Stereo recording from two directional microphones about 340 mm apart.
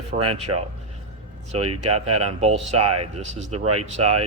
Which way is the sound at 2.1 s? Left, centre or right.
Centre.